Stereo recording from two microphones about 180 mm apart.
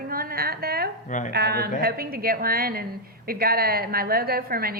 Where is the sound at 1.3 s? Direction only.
65° right (ahead or behind).